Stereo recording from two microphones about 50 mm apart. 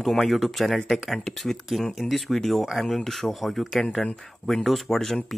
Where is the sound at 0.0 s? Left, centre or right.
Centre.